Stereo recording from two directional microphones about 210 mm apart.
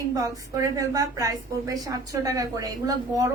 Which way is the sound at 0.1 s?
15° right (ahead or behind).